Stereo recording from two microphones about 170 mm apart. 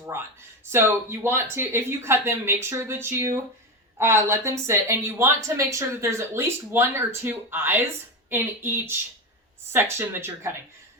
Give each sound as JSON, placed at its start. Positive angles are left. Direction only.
{"t": 0.1, "sound": "a woman's voice", "side_deg": -15}